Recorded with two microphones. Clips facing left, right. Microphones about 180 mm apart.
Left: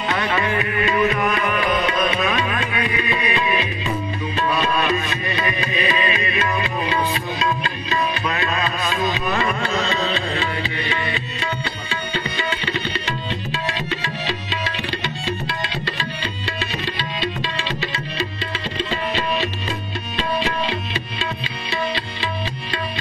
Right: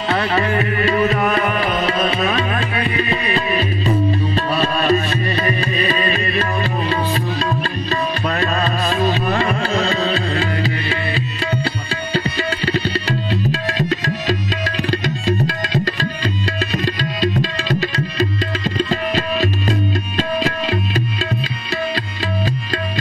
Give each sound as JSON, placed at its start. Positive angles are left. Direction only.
{"t": 0.1, "sound": "music", "side_deg": -35}
{"t": 12.1, "sound": "tabla", "side_deg": -35}
{"t": 13.3, "sound": "music", "side_deg": -40}
{"t": 14.9, "sound": "tabla", "side_deg": -40}
{"t": 16.7, "sound": "music", "side_deg": -40}